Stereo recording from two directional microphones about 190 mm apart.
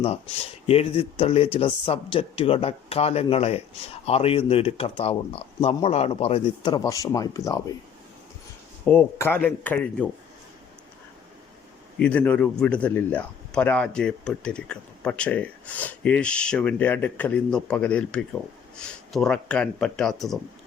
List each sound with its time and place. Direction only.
0.7 s speech: 30° left (ahead or behind)
8.9 s speech: 10° left (ahead or behind)
11.9 s speech: 5° left (ahead or behind)